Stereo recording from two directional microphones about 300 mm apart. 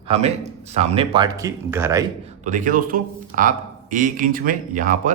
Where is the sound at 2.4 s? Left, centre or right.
Right.